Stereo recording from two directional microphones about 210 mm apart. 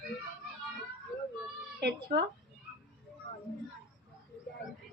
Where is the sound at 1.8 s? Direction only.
55° right (ahead or behind).